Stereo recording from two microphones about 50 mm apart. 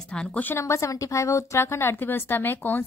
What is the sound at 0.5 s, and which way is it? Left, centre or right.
A woman's voice, left.